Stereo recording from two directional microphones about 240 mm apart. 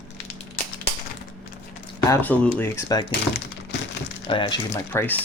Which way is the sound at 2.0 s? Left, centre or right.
Centre.